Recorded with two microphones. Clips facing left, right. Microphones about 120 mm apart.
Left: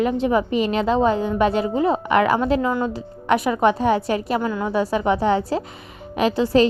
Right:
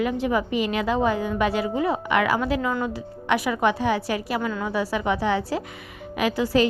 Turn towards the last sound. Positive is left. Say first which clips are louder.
# left 4 dB
turn(degrees=30)  # may be behind; listen again after turning